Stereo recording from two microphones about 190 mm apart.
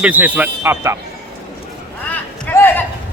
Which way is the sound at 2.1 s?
10° left (ahead or behind).